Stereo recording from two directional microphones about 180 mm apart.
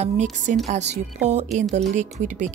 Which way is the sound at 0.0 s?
40° right (ahead or behind).